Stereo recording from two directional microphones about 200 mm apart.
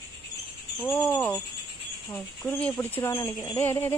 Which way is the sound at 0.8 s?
5° left (ahead or behind).